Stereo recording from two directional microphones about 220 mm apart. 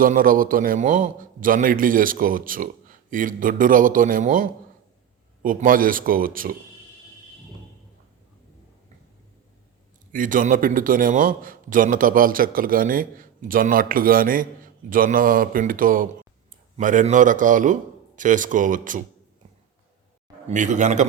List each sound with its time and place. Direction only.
0.0 s a man's voice: 40° right (ahead or behind)
10.1 s a man's voice: 35° right (ahead or behind)
20.5 s a man's voice: 35° right (ahead or behind)